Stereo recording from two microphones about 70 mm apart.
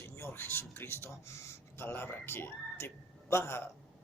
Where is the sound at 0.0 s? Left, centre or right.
Left.